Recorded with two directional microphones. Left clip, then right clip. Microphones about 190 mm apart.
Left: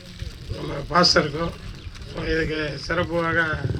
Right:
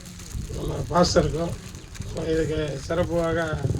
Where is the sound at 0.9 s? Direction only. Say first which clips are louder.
Left 3 dB; 25° left (ahead or behind).